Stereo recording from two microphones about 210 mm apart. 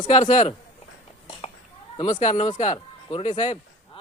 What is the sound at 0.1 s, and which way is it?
Speech, 35° left (ahead or behind).